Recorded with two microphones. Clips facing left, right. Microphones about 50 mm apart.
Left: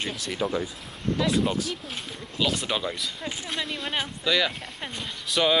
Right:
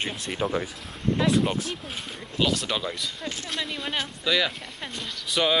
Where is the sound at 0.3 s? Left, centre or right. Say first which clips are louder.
Even; right.